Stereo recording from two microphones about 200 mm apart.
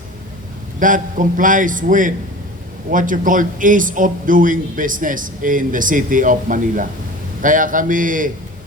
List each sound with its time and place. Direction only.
0.8 s a man's voice: 40° right (ahead or behind)